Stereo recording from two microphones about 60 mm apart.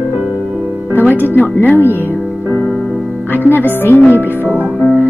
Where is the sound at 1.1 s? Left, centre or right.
Left.